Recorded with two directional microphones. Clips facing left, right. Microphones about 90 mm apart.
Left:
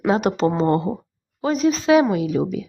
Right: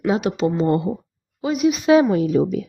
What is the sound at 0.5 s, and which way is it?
Speech, 30° left (ahead or behind).